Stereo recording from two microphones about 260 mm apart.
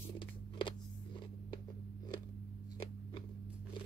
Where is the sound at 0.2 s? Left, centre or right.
Centre.